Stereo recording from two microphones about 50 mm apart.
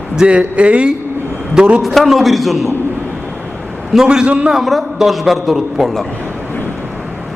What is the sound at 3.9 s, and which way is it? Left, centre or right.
Speech, centre.